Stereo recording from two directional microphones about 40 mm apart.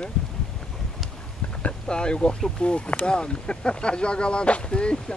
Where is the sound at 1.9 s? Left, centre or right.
Left.